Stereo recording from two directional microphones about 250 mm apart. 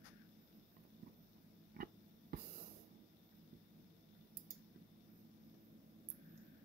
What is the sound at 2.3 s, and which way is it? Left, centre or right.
Snort, right.